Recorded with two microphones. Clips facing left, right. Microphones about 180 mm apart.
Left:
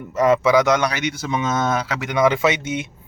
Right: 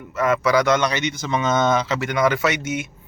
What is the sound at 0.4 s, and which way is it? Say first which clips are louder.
Speech: left 2 dB; 20° left (ahead or behind).